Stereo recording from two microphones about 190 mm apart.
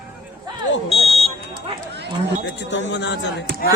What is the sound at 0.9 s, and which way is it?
Buzzer, 30° left (ahead or behind).